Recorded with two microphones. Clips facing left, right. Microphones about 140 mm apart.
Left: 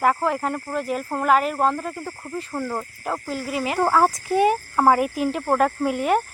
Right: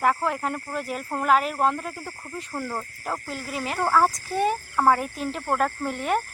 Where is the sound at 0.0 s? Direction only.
Centre (ahead or behind).